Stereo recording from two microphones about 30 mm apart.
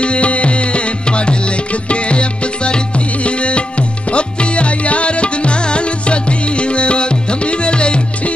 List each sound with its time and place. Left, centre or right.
0.0 s music: left